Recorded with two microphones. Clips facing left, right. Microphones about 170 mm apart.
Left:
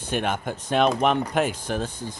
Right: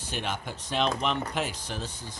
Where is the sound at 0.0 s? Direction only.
55° left (ahead or behind).